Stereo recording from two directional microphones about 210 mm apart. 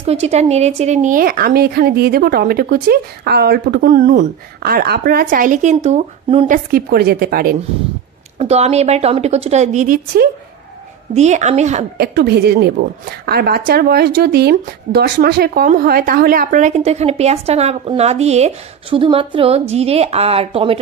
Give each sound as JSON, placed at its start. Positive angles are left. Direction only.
{"t": 0.0, "sound": "speech", "side_deg": -30}
{"t": 8.4, "sound": "a woman's voice", "side_deg": -30}
{"t": 12.0, "sound": "a woman's voice", "side_deg": -50}